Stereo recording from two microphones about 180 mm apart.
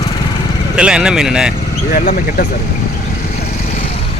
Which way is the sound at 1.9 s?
45° left (ahead or behind).